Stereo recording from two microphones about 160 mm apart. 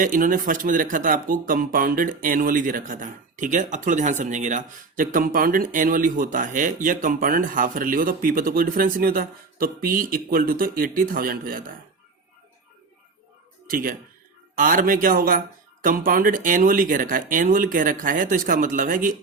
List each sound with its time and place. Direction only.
0.0 s speech: 55° right (ahead or behind)
13.7 s speech: 65° right (ahead or behind)